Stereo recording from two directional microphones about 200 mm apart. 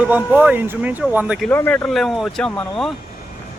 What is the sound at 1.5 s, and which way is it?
Speech, 10° left (ahead or behind).